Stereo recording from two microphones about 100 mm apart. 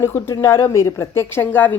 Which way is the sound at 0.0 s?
25° left (ahead or behind).